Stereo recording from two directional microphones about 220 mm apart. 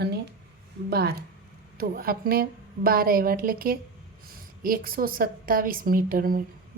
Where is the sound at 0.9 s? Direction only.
45° right (ahead or behind).